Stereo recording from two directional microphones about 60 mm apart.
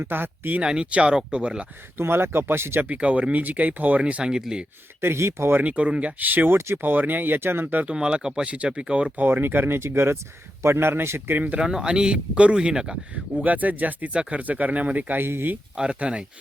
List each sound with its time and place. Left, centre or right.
0.0 s speech: right
0.6 s speech: centre
2.0 s speech: right
2.8 s speech: right
4.9 s a man's voice: right
5.6 s speech: right
7.9 s speech: centre
9.1 s a man's voice: right
11.4 s speech: centre
15.2 s speech: right
15.7 s speech: centre